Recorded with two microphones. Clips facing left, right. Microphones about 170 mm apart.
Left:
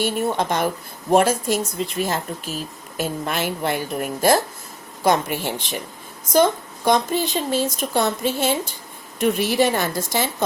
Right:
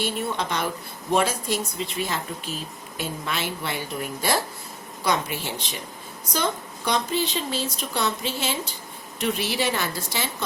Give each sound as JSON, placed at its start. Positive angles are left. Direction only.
{"t": 0.0, "sound": "a woman's voice", "side_deg": 45}